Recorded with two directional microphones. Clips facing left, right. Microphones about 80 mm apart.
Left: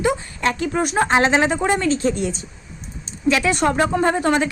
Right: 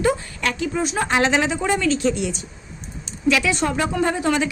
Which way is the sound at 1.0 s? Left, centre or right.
Left.